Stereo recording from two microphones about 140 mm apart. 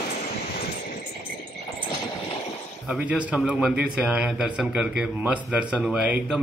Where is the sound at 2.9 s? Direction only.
10° right (ahead or behind).